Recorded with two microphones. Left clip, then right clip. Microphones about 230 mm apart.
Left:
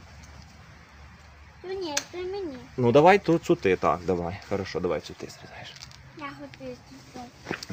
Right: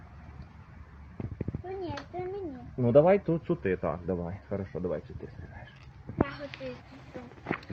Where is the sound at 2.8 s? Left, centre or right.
Left.